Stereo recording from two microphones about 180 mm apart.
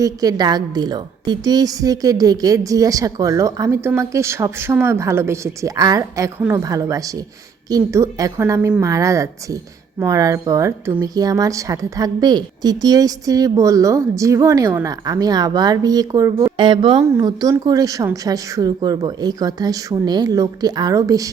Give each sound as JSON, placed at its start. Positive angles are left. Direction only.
{"t": 0.0, "sound": "a woman's voice", "side_deg": -20}
{"t": 17.0, "sound": "a woman's voice", "side_deg": -15}